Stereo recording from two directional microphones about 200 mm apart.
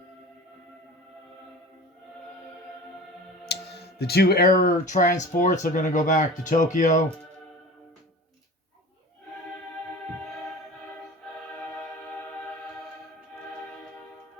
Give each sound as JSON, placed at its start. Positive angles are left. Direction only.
{"t": 3.5, "sound": "speech", "side_deg": 55}